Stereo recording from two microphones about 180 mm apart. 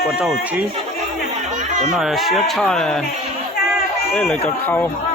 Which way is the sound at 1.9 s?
Centre (ahead or behind).